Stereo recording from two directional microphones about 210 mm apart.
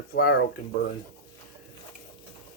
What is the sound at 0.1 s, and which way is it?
Speech, 50° left (ahead or behind).